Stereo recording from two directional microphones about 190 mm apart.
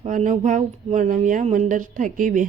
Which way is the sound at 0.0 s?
40° right (ahead or behind).